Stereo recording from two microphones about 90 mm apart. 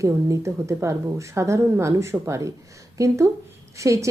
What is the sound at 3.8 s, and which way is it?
Speech, 35° right (ahead or behind).